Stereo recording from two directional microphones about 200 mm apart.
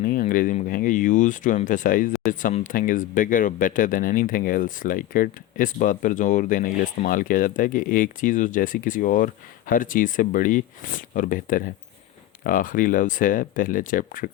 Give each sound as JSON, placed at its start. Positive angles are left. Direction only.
{"t": 0.0, "sound": "speech", "side_deg": 45}